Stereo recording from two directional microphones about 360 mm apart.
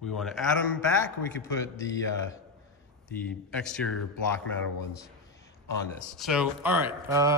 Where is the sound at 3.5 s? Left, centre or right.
Centre.